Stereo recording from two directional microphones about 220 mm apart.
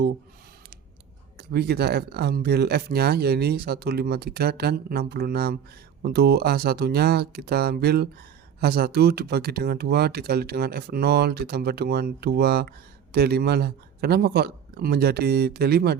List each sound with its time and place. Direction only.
1.4 s speech: 45° right (ahead or behind)